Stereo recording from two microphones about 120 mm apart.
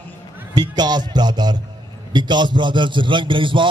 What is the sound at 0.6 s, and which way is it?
A man's voice, 35° right (ahead or behind).